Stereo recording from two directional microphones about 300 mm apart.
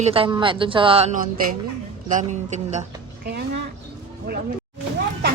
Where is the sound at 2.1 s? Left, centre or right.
Right.